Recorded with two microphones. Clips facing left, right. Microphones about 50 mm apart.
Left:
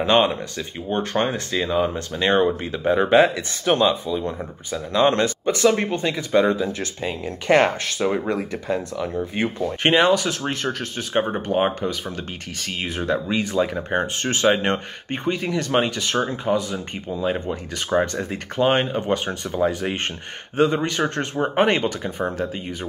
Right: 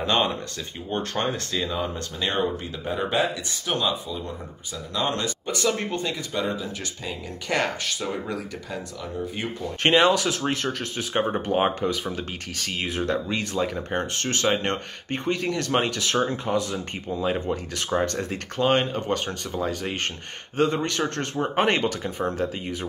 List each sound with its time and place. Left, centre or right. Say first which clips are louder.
0.0 s speech: left 5 dB; left
4.9 s speech: left 8 dB; left
5.6 s speech: left 6 dB; left
6.6 s speech: left 8 dB; left
9.8 s speech: left 1 dB; centre